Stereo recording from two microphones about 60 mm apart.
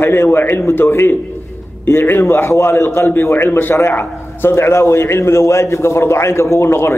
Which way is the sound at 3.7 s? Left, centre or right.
Left.